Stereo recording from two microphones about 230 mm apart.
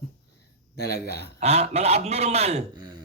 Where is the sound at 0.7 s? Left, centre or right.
Left.